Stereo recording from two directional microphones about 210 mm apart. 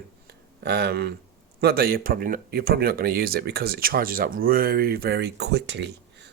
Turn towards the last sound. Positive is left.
turn(degrees=-55)  # may be behind; listen again after turning